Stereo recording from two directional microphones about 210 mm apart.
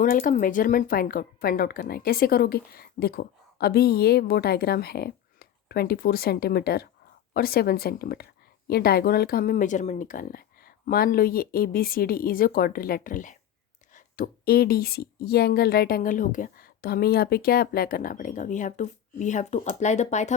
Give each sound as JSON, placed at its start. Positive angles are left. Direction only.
{"t": 0.0, "sound": "speech", "side_deg": 40}